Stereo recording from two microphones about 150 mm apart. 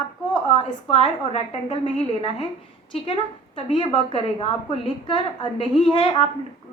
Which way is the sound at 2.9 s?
40° left (ahead or behind).